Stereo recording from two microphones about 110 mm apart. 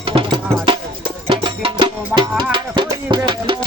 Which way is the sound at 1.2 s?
50° right (ahead or behind).